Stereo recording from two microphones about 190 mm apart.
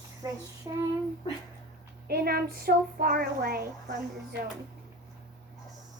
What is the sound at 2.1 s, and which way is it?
Child singing, 55° right (ahead or behind).